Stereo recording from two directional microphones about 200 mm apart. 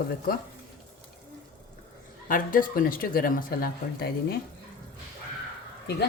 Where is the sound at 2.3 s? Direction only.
45° left (ahead or behind).